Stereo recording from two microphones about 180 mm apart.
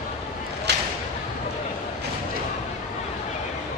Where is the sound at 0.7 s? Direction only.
65° right (ahead or behind).